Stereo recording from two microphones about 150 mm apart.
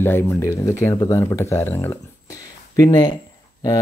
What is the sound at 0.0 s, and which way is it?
Speech, 15° left (ahead or behind).